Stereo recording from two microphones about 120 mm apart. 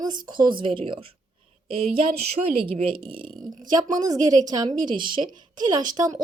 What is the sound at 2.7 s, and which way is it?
Speech, 50° right (ahead or behind).